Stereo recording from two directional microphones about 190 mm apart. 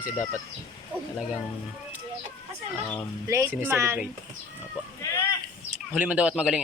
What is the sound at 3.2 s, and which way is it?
Speech, 15° right (ahead or behind).